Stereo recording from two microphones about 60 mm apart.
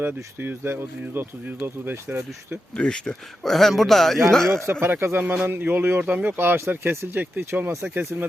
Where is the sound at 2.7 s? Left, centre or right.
Centre.